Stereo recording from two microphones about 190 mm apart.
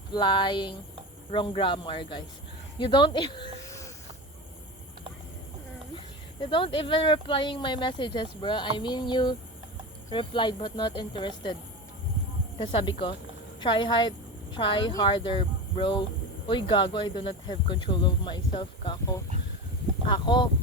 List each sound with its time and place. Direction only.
0.1 s speech: 25° left (ahead or behind)
6.4 s speech: 25° left (ahead or behind)
12.5 s speech: 25° left (ahead or behind)